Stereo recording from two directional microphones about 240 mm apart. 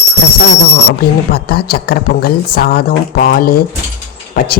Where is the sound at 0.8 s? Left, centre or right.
Left.